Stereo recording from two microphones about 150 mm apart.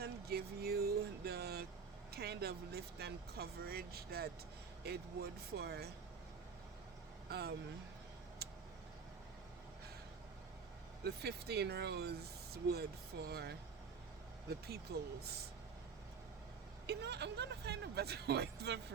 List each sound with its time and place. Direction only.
0.0 s vehicle: 90° right
2.1 s speech: 90° right
7.3 s speech: 90° right
11.0 s speech: 90° right
14.9 s speech: 90° right
16.8 s speech: 90° right